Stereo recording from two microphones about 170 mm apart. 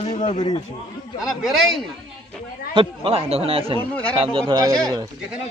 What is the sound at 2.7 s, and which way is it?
Speech, 35° right (ahead or behind).